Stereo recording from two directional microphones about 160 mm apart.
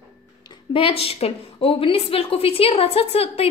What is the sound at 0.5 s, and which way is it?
A woman's voice, 35° left (ahead or behind).